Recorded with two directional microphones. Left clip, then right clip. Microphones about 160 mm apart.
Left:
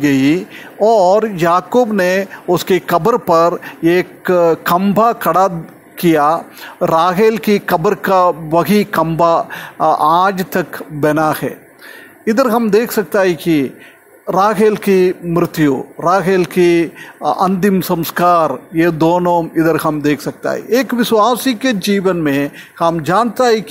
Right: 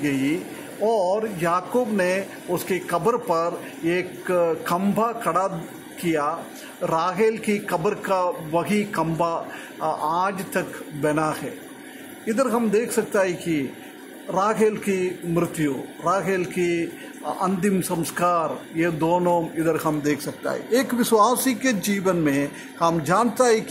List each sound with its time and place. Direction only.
0.0 s a man's voice: 45° left (ahead or behind)